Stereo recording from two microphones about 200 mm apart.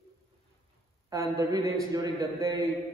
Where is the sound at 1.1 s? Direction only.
15° right (ahead or behind).